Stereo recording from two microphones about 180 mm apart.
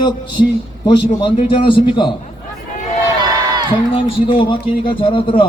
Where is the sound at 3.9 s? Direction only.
30° left (ahead or behind).